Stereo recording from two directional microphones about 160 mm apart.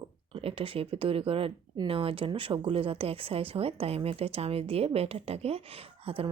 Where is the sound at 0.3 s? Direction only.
35° right (ahead or behind).